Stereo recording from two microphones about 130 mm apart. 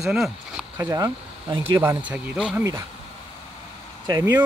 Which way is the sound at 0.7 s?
15° right (ahead or behind).